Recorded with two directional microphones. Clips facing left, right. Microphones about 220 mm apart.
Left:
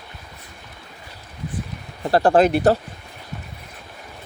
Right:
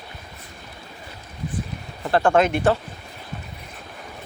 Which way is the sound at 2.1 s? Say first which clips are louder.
Left 3 dB; 35° left (ahead or behind).